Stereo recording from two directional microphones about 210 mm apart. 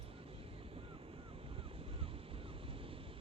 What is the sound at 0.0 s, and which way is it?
Vehicle, 25° right (ahead or behind).